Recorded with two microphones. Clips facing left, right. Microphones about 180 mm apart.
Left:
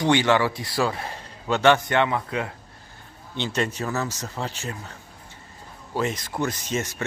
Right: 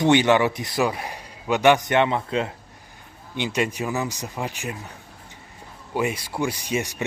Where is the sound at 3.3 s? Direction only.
10° right (ahead or behind).